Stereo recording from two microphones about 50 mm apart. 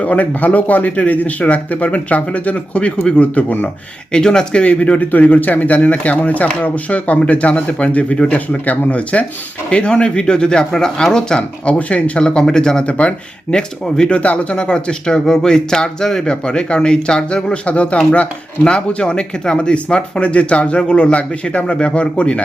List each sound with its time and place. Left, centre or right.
0.0 s speech: left
4.1 s speech: centre
11.3 s speech: left
13.5 s speech: centre